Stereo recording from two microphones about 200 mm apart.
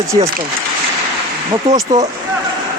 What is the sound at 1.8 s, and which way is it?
Speech, 20° right (ahead or behind).